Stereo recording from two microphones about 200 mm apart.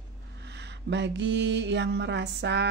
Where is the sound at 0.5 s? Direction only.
60° right (ahead or behind).